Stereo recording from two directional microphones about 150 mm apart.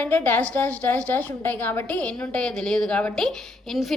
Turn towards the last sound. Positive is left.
turn(degrees=0)  # may be behind; listen again after turning